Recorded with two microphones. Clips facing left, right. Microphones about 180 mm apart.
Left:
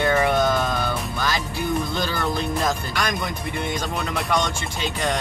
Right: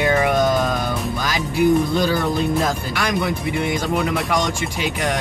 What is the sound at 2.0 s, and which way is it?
Speech, 5° right (ahead or behind).